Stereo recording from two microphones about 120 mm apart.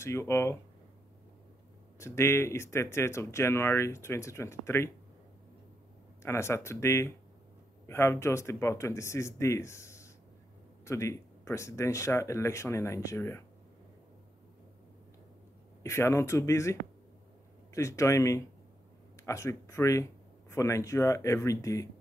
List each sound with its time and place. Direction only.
0.0 s speech: 20° left (ahead or behind)
2.0 s speech: 20° left (ahead or behind)
6.2 s speech: 20° left (ahead or behind)
15.8 s speech: 25° left (ahead or behind)
17.7 s speech: 25° left (ahead or behind)